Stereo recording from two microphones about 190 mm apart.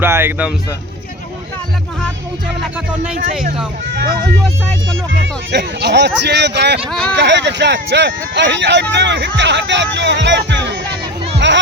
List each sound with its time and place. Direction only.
0.0 s speech: 10° right (ahead or behind)
5.2 s speech: 65° right (ahead or behind)
11.3 s music: 70° right (ahead or behind)